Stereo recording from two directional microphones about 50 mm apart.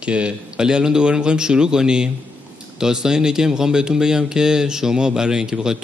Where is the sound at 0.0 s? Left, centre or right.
Right.